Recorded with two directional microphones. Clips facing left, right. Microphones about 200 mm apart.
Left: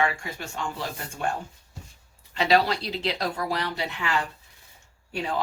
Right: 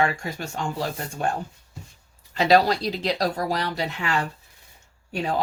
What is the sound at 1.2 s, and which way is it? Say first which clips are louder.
Speech: right 3 dB; 40° right (ahead or behind).